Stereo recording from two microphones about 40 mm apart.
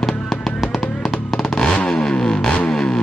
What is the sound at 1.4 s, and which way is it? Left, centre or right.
Vehicle, centre.